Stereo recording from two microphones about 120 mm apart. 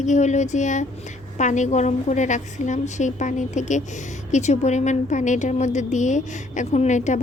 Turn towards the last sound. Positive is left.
turn(degrees=90)